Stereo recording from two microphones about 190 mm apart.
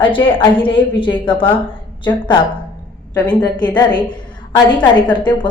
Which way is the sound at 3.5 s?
20° left (ahead or behind).